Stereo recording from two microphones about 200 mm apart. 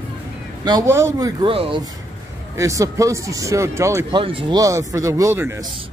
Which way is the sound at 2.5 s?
15° right (ahead or behind).